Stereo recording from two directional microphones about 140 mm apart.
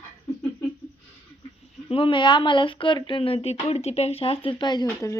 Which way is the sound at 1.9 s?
40° left (ahead or behind).